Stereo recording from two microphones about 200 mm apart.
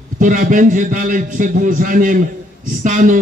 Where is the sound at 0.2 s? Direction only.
45° right (ahead or behind).